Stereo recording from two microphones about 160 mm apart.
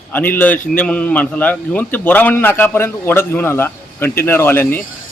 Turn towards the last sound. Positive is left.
turn(degrees=15)  # may be behind; listen again after turning